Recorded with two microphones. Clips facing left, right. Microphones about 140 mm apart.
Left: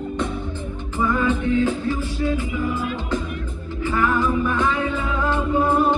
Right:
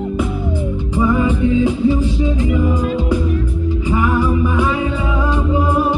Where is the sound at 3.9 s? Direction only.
15° right (ahead or behind).